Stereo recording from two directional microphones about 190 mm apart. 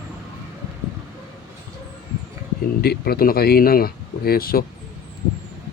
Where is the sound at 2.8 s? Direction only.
55° left (ahead or behind).